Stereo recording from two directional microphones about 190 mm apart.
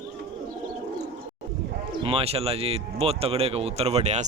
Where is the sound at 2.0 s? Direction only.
30° right (ahead or behind).